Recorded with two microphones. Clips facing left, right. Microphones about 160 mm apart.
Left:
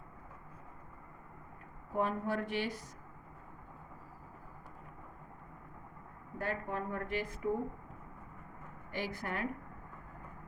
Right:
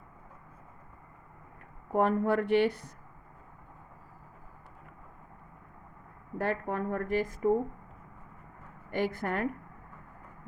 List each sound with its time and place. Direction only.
1.9 s speech: 60° right (ahead or behind)
6.4 s a woman's voice: 60° right (ahead or behind)
8.9 s a woman's voice: 55° right (ahead or behind)